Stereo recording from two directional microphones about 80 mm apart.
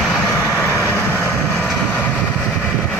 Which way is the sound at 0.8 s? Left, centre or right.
Left.